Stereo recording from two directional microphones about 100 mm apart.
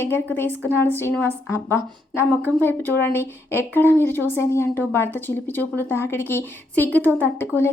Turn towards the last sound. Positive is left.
turn(degrees=20)  # may be behind; listen again after turning